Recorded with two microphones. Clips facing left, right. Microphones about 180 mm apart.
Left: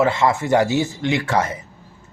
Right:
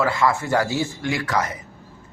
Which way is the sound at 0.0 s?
25° left (ahead or behind).